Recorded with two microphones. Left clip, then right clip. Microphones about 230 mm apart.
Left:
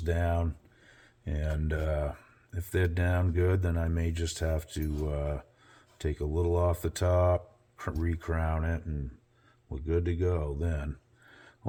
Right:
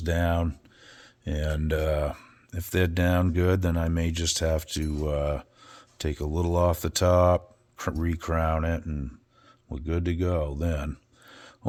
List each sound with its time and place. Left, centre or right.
0.0 s speech: right